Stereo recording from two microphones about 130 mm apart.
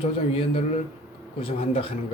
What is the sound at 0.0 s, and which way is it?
A man's voice, 50° left (ahead or behind).